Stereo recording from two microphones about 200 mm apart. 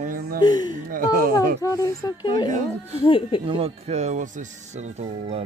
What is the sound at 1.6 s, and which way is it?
Speech, 15° left (ahead or behind).